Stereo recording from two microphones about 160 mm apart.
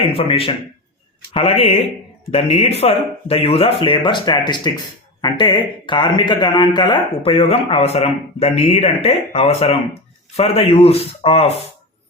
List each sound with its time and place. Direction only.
0.0 s speech: 35° left (ahead or behind)